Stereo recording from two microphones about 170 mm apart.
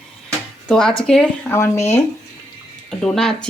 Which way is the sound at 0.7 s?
5° left (ahead or behind).